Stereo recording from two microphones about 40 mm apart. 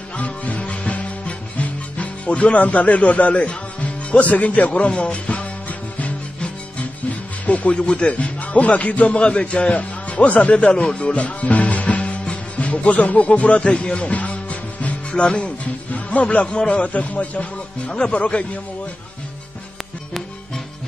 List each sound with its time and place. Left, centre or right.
0.2 s music: left
7.4 s speech: left